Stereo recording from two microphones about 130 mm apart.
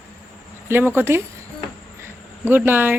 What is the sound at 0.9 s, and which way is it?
Speech, 20° right (ahead or behind).